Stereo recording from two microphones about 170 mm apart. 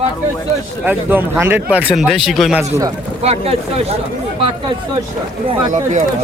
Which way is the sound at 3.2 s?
35° right (ahead or behind).